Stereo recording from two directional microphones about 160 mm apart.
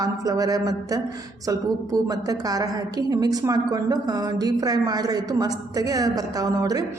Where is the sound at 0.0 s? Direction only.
25° right (ahead or behind).